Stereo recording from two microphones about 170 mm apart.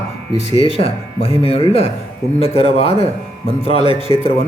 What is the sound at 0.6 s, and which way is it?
Speech, 35° left (ahead or behind).